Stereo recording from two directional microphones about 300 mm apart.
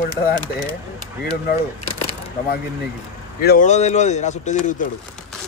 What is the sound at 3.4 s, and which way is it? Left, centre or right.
A man's voice, left.